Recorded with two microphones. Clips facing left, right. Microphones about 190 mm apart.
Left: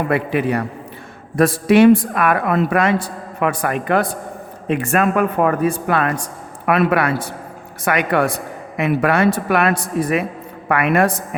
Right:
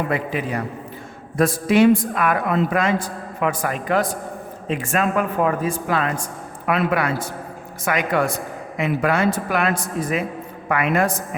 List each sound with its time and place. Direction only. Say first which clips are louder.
0.1 s a woman's voice: left 5 dB; 65° left (ahead or behind)